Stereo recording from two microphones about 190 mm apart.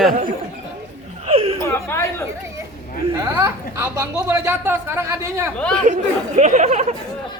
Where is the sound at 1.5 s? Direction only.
15° left (ahead or behind).